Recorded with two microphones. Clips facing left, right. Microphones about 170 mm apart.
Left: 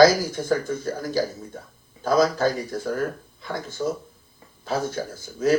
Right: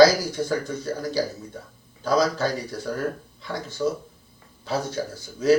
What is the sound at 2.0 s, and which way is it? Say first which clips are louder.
Speech: left 2 dB; 50° left (ahead or behind).